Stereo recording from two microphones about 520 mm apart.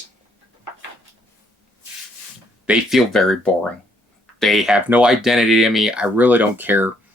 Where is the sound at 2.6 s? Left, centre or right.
Centre.